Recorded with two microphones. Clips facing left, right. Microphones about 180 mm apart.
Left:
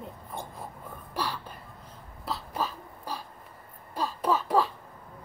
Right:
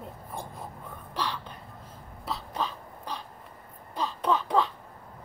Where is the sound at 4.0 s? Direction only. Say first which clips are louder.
Even; 5° left (ahead or behind).